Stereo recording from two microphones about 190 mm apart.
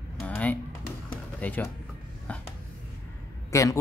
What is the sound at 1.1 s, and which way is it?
Music, 10° left (ahead or behind).